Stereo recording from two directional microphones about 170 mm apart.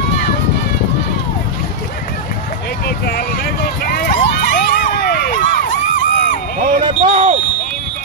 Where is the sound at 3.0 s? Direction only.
60° left (ahead or behind).